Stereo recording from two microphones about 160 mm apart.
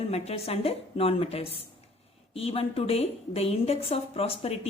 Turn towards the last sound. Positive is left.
turn(degrees=40)  # may be behind; listen again after turning